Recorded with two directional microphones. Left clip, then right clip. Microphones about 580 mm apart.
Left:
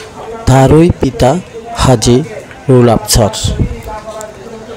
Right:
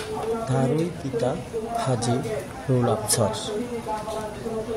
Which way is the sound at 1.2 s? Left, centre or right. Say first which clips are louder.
Left 15 dB; centre.